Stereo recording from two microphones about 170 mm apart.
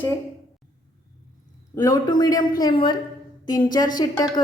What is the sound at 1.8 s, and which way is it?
A man's voice, 20° left (ahead or behind).